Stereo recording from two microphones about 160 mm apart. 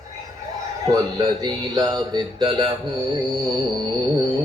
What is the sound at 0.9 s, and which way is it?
Speech, 25° right (ahead or behind).